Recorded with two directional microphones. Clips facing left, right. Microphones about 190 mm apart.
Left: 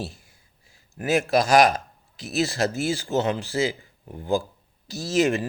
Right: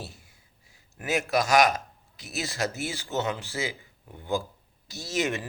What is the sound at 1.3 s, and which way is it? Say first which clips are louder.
A man's voice: left 3 dB; 35° left (ahead or behind).